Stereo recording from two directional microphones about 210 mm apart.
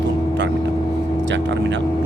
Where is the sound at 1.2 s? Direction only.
60° right (ahead or behind).